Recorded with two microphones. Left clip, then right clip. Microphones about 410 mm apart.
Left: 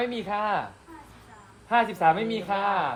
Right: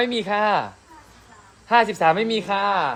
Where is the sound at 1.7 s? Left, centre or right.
Right.